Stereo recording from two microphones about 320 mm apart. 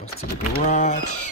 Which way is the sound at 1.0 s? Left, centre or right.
Left.